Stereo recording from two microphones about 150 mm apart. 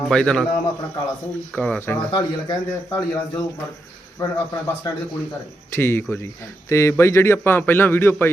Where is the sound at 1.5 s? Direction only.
10° left (ahead or behind).